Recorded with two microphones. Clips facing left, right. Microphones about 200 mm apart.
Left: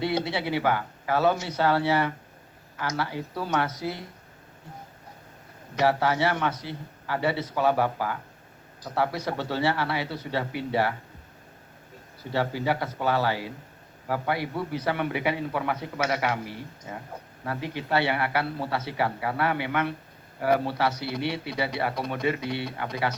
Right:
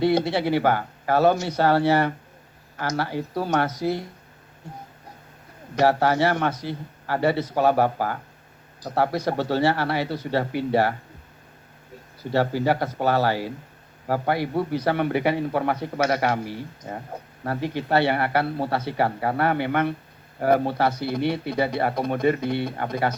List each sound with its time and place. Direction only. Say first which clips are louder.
0.0 s a man's voice: right 6 dB; 45° right (ahead or behind)
5.7 s a man's voice: right 4 dB; 40° right (ahead or behind)
12.3 s a man's voice: right 5 dB; 40° right (ahead or behind)